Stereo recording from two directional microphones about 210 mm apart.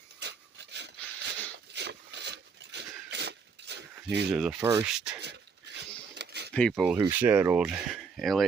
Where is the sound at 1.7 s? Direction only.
55° right (ahead or behind).